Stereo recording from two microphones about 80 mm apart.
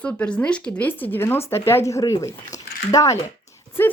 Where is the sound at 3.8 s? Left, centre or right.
Left.